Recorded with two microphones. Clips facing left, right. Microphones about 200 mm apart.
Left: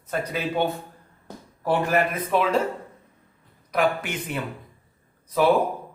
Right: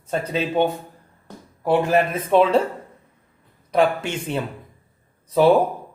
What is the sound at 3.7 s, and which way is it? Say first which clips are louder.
Speech: right 4 dB; 30° right (ahead or behind).